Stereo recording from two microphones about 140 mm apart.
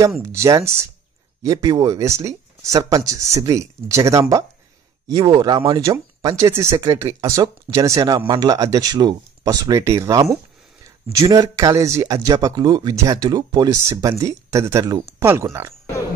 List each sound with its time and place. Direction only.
0.2 s speech: 20° right (ahead or behind)
5.9 s speech: 25° right (ahead or behind)